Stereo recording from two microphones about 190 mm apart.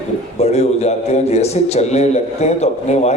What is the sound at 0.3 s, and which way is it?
A man's voice, 35° left (ahead or behind).